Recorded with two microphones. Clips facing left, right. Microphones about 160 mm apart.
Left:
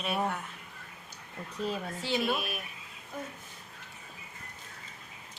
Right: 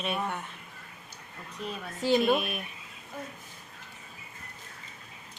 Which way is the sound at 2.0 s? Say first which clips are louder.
Right 8 dB; 45° right (ahead or behind).